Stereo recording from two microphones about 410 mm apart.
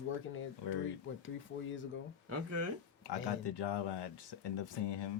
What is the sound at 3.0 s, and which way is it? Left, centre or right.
Speech, left.